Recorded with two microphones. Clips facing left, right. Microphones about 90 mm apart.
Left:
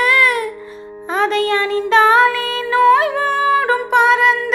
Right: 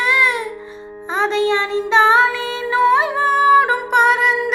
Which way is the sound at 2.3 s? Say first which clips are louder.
Left 2 dB; 20° right (ahead or behind).